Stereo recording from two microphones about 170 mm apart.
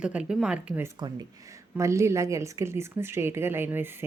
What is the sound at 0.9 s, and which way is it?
Speech, 25° right (ahead or behind).